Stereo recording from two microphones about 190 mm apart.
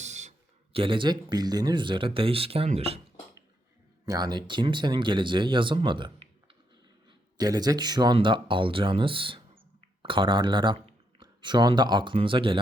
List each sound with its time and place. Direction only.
0.0 s speech: 35° right (ahead or behind)
4.0 s speech: 20° right (ahead or behind)